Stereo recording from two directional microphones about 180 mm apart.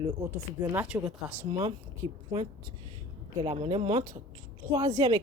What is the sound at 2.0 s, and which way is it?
Speech, 25° right (ahead or behind).